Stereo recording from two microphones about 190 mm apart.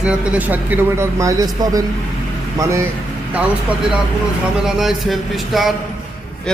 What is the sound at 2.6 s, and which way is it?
Speech, 15° right (ahead or behind).